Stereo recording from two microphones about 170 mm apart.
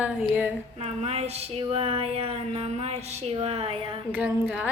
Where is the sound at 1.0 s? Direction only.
40° right (ahead or behind).